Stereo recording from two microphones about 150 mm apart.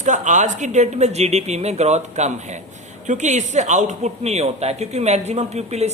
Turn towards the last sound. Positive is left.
turn(degrees=-45)  # may be behind; listen again after turning